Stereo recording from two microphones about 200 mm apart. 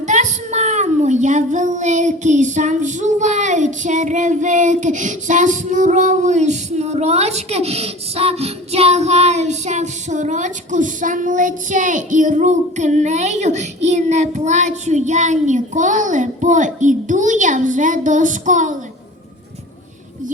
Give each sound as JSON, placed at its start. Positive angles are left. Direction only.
{"t": 0.0, "sound": "a child's voice", "side_deg": -35}